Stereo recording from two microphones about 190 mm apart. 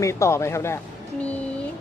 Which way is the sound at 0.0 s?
15° left (ahead or behind).